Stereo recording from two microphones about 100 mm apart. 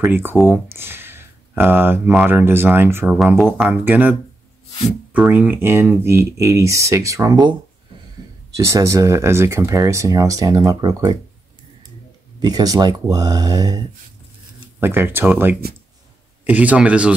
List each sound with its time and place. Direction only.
0.0 s speech: 20° right (ahead or behind)
3.1 s speech: 10° right (ahead or behind)
3.3 s speech: centre (ahead or behind)
3.6 s speech: 20° right (ahead or behind)
8.6 s speech: 30° right (ahead or behind)
12.4 s speech: 40° right (ahead or behind)
14.8 s speech: 25° right (ahead or behind)